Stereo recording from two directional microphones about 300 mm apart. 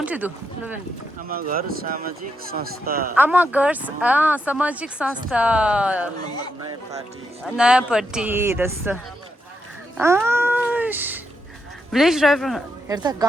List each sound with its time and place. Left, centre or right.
0.0 s speech: centre
1.3 s speech: right
3.2 s speech: centre
6.2 s speech: centre
7.4 s speech: centre
10.0 s cat: centre
11.9 s speech: centre
12.9 s a woman's voice: centre